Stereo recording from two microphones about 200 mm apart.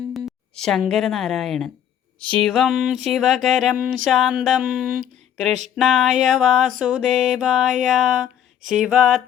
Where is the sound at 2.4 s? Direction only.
Centre (ahead or behind).